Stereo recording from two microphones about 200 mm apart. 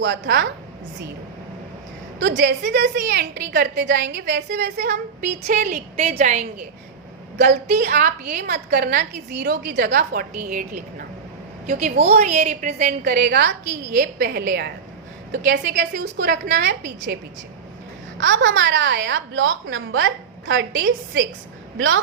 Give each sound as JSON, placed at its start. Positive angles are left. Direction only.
{"t": 0.0, "sound": "a woman's voice", "side_deg": -60}
{"t": 2.2, "sound": "a woman's voice", "side_deg": -60}
{"t": 5.5, "sound": "a woman's voice", "side_deg": -40}
{"t": 7.3, "sound": "a woman's voice", "side_deg": -55}
{"t": 7.8, "sound": "a woman's voice", "side_deg": -40}
{"t": 11.8, "sound": "a woman's voice", "side_deg": -30}
{"t": 18.2, "sound": "a woman's voice", "side_deg": -65}